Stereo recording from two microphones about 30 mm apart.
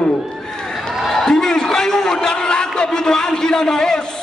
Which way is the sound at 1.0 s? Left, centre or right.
Centre.